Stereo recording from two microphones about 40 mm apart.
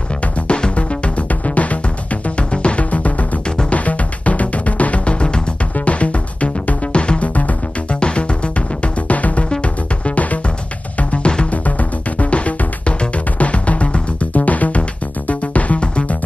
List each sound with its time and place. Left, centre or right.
0.5 s music: left
8.0 s music: left